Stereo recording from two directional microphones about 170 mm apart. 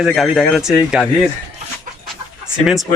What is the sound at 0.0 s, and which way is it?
Speech, centre (ahead or behind).